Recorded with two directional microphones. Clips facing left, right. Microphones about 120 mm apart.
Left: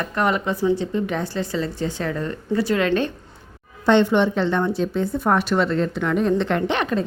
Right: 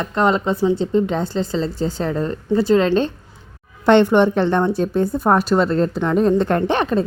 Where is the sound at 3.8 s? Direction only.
55° right (ahead or behind); by 7.0 s 35° right (ahead or behind).